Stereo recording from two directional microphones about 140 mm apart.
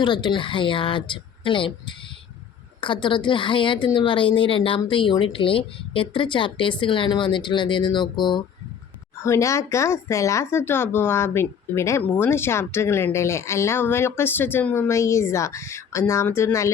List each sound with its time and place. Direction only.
0.0 s speech: 35° left (ahead or behind)
9.2 s speech: 20° left (ahead or behind)